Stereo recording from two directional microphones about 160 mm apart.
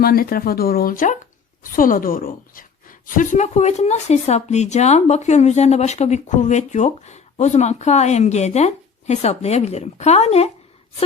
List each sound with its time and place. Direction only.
0.0 s a woman's voice: 70° left (ahead or behind); by 10.5 s 40° left (ahead or behind)